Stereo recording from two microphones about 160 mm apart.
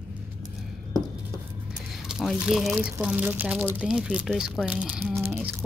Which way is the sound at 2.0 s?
Centre (ahead or behind).